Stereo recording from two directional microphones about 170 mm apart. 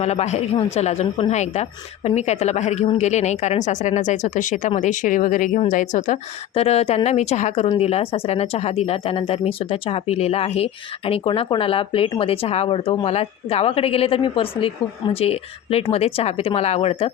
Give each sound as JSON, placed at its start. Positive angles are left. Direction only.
{"t": 0.0, "sound": "a woman's voice", "side_deg": 40}